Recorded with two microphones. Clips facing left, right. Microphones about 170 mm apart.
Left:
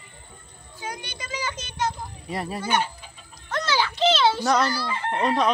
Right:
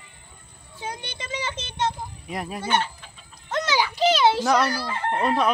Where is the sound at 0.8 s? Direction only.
25° right (ahead or behind).